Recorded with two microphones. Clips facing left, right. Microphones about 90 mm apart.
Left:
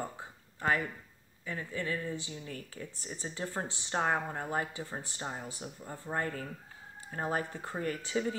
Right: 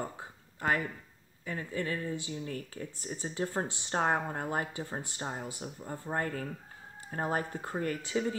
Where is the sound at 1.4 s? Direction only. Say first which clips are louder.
Right 2 dB; 40° right (ahead or behind).